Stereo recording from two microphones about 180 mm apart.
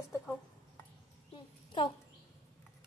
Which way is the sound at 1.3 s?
25° left (ahead or behind).